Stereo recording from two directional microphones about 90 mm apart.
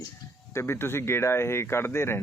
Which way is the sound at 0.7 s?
30° left (ahead or behind).